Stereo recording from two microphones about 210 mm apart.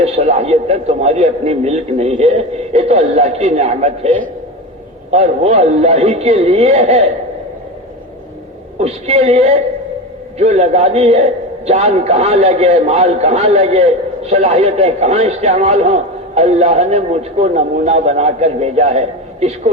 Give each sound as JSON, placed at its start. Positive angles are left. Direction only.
{"t": 0.0, "sound": "a man's voice", "side_deg": -30}
{"t": 5.1, "sound": "a man's voice", "side_deg": -30}
{"t": 8.8, "sound": "a woman's voice", "side_deg": -30}